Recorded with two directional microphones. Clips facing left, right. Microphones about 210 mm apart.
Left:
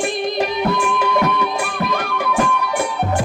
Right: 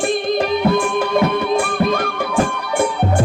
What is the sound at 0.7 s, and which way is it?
Music, 30° right (ahead or behind).